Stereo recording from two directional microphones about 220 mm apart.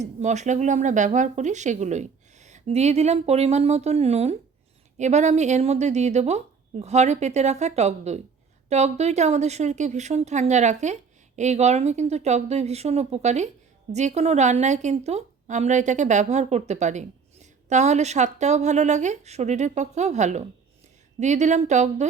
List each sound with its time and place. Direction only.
0.0 s a woman's voice: 30° right (ahead or behind)